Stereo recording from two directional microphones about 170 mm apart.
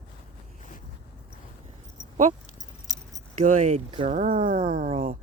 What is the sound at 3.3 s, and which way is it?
Speech, 50° right (ahead or behind).